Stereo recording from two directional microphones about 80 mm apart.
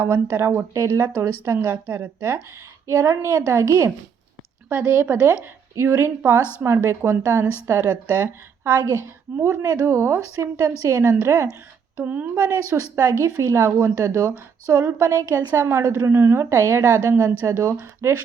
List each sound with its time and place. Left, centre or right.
0.0 s a woman's voice: right
2.8 s a woman's voice: right
4.7 s a woman's voice: right
7.9 s a woman's voice: right
8.6 s a woman's voice: right
9.4 s a woman's voice: right
11.9 s a woman's voice: right
12.7 s a woman's voice: right